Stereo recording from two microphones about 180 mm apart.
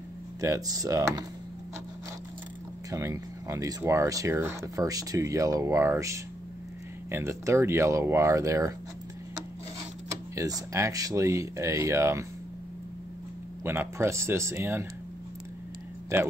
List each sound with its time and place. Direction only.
0.4 s speech: 20° right (ahead or behind)
2.9 s speech: 15° right (ahead or behind)
10.3 s speech: 20° right (ahead or behind)
13.7 s speech: 15° right (ahead or behind)
16.1 s speech: 15° right (ahead or behind)